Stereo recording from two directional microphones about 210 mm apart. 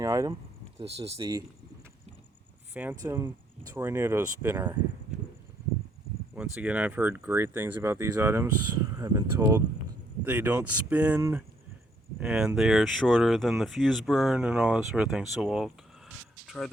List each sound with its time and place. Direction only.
0.0 s speech: 15° right (ahead or behind)
0.8 s speech: 30° right (ahead or behind)
2.7 s speech: 10° right (ahead or behind)
6.3 s speech: 5° right (ahead or behind)